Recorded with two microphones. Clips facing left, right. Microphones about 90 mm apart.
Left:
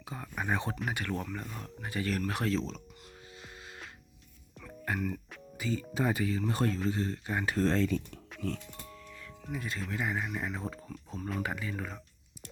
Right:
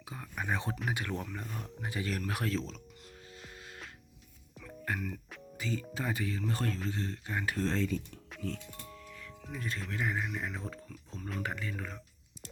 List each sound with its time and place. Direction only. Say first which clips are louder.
0.0 s speech: left 2 dB; centre (ahead or behind)
3.2 s music: left 1 dB; 5° left (ahead or behind)
5.9 s speech: left 9 dB; 20° left (ahead or behind)
6.1 s speech: left 4 dB; 5° left (ahead or behind)
6.5 s speech: left 4 dB; 20° left (ahead or behind)
7.5 s speech: left 5 dB; 45° left (ahead or behind)
8.3 s music: left 2 dB; centre (ahead or behind)
9.4 s speech: left 2 dB; 5° left (ahead or behind)